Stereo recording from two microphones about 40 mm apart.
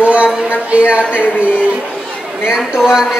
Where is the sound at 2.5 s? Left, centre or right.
Centre.